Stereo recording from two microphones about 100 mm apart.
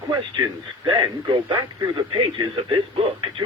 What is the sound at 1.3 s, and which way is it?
Speech, 55° right (ahead or behind).